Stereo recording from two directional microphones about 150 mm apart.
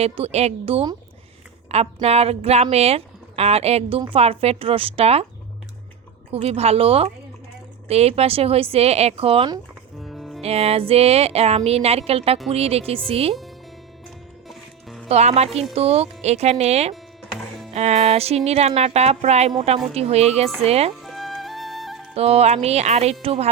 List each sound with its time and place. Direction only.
0.0 s speech: 45° right (ahead or behind)
6.3 s speech: 45° right (ahead or behind)
10.0 s music: centre (ahead or behind)
10.4 s speech: 45° right (ahead or behind)
14.4 s music: centre (ahead or behind)
15.1 s speech: 45° right (ahead or behind)
16.9 s music: centre (ahead or behind)
17.7 s speech: 45° right (ahead or behind)
21.0 s music: centre (ahead or behind)
22.1 s speech: 45° right (ahead or behind)